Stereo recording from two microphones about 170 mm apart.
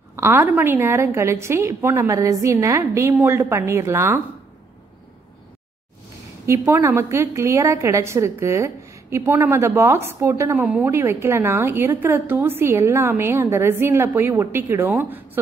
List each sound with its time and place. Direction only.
0.1 s a woman's voice: 15° right (ahead or behind)
6.4 s a woman's voice: 15° right (ahead or behind)